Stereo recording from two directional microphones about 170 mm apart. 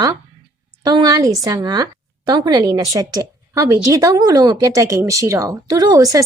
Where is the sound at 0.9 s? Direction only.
25° right (ahead or behind).